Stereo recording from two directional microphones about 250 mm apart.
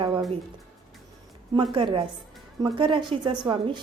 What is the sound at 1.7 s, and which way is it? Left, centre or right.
A woman's voice, centre.